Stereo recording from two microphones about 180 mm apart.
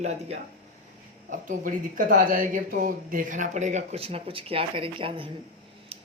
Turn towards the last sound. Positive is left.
turn(degrees=-30)  # may be behind; listen again after turning